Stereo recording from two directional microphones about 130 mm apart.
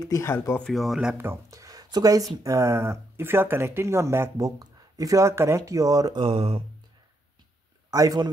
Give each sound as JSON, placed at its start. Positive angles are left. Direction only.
{"t": 0.0, "sound": "speech", "side_deg": 25}
{"t": 0.7, "sound": "speech", "side_deg": 0}
{"t": 1.1, "sound": "a sound", "side_deg": -20}
{"t": 2.4, "sound": "speech", "side_deg": -25}
{"t": 6.2, "sound": "speech", "side_deg": -45}
{"t": 7.9, "sound": "speech", "side_deg": -30}